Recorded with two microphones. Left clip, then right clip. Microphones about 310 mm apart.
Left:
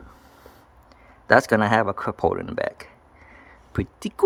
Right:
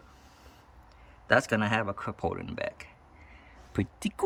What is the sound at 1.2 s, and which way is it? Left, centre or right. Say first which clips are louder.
Speech: left 8 dB; centre.